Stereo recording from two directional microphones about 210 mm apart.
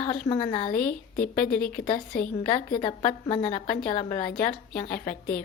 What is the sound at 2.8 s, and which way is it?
Speech, 25° left (ahead or behind).